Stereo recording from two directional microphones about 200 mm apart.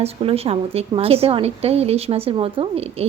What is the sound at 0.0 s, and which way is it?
A woman's voice, 30° right (ahead or behind).